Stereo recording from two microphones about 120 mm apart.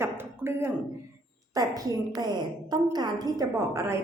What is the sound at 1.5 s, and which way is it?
A woman's voice, 30° right (ahead or behind).